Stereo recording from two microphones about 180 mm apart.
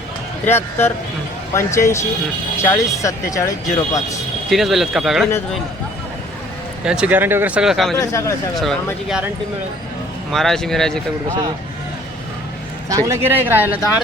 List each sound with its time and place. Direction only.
0.4 s speech: 15° left (ahead or behind)
4.4 s speech: centre (ahead or behind)
6.8 s speech: 5° right (ahead or behind)
7.9 s speech: 15° left (ahead or behind)
8.5 s speech: centre (ahead or behind)
10.3 s speech: centre (ahead or behind)
12.9 s speech: 15° right (ahead or behind)